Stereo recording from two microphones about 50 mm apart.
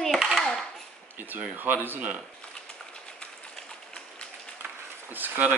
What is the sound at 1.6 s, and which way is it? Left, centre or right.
Speech, right.